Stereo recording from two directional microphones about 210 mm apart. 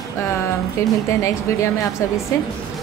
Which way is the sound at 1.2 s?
15° left (ahead or behind).